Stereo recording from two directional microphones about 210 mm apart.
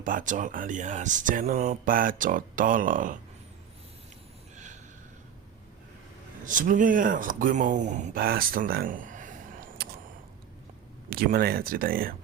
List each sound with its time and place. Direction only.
0.0 s speech: 40° right (ahead or behind)
4.5 s a sound: 35° right (ahead or behind)
6.4 s speech: 40° right (ahead or behind)
11.1 s speech: 45° right (ahead or behind)